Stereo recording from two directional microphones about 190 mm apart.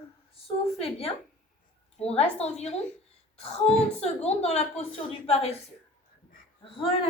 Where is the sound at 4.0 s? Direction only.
35° left (ahead or behind).